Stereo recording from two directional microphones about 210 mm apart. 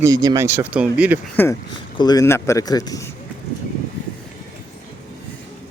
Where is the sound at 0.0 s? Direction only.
15° right (ahead or behind).